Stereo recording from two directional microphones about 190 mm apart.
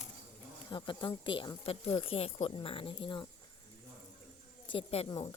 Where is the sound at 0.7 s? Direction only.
25° left (ahead or behind).